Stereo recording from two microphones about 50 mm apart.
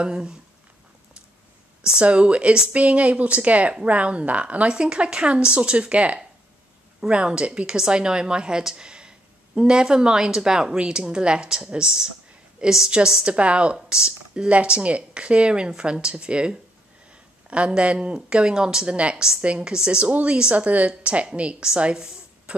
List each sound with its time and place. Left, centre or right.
0.0 s speech: centre
1.9 s a woman's voice: right
20.1 s speech: right
22.5 s a sound: right